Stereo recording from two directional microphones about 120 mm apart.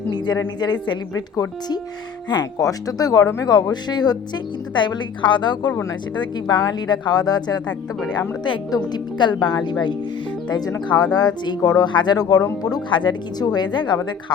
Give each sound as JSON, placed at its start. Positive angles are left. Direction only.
{"t": 0.1, "sound": "speech", "side_deg": 35}
{"t": 2.3, "sound": "speech", "side_deg": 30}
{"t": 11.0, "sound": "speech", "side_deg": 30}